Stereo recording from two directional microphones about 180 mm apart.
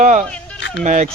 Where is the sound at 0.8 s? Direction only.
40° right (ahead or behind).